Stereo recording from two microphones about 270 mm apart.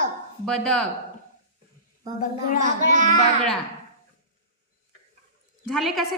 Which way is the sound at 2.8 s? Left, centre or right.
Right.